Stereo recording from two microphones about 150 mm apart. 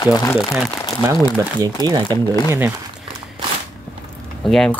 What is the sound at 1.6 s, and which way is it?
Speech, 25° right (ahead or behind).